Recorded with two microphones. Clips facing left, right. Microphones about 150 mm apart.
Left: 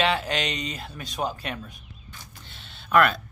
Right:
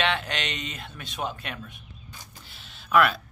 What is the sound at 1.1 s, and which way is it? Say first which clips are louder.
Speech: left 3 dB; 35° left (ahead or behind).